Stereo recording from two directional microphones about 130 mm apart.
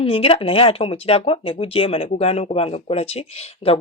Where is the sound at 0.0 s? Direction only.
45° left (ahead or behind).